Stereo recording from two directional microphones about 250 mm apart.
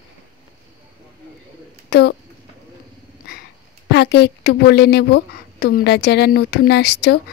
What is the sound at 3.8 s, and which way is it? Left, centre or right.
A woman's voice, left.